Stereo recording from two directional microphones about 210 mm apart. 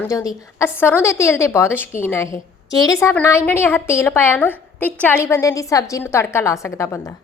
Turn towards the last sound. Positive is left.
turn(degrees=15)  # may be behind; listen again after turning